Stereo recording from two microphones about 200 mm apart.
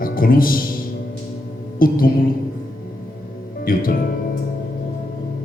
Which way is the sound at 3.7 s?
45° left (ahead or behind).